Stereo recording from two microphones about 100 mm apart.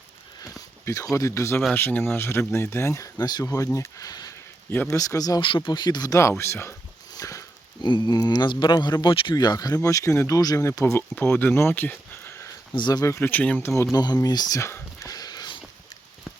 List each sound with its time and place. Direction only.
0.9 s speech: 30° left (ahead or behind)
5.4 s speech: 55° left (ahead or behind)
6.1 s speech: 25° left (ahead or behind)
7.2 s sniff: 35° left (ahead or behind)
7.9 s speech: 45° left (ahead or behind); by 12.5 s 25° left (ahead or behind)
12.7 s speech: 45° left (ahead or behind)
13.1 s speech: 15° left (ahead or behind)
13.9 s a sound: 40° left (ahead or behind)